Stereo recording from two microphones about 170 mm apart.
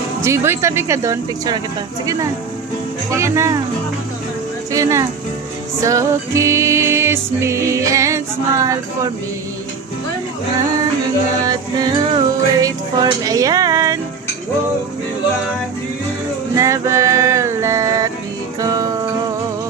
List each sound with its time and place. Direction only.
0.2 s music: 15° right (ahead or behind)
3.1 s music: 15° right (ahead or behind)
4.7 s music: 20° right (ahead or behind)
11.4 s music: 25° right (ahead or behind)
16.6 s music: 15° right (ahead or behind)